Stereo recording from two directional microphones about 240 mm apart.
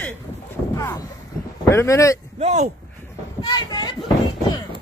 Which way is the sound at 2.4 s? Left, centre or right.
Right.